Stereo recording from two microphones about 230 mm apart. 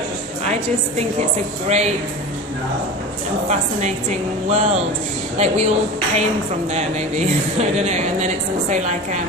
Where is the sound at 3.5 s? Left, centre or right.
Right.